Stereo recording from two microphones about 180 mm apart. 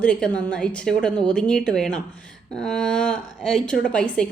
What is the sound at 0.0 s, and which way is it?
A woman's voice, 5° left (ahead or behind).